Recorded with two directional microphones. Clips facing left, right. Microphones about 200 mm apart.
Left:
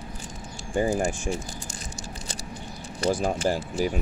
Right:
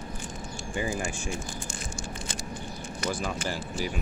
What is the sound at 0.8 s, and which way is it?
Speech, 45° left (ahead or behind).